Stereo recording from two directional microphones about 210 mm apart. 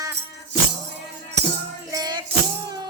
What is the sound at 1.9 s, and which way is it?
Music, 20° right (ahead or behind).